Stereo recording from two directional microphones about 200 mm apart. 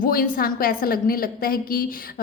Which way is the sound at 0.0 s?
45° left (ahead or behind).